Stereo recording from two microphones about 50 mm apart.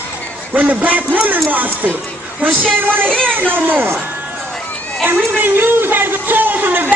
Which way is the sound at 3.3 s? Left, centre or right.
Right.